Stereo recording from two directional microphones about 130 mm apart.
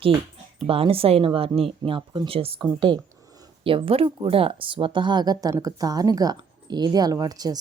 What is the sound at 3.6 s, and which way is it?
Speech, 45° right (ahead or behind).